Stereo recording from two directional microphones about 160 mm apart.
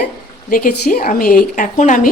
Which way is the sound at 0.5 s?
60° left (ahead or behind).